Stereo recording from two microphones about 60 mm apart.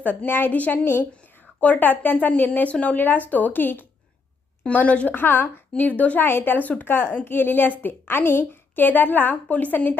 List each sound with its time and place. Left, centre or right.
0.0 s a woman's voice: left
5.1 s a woman's voice: left
6.2 s a woman's voice: left